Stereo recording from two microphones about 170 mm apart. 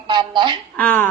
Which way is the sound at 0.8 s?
10° left (ahead or behind).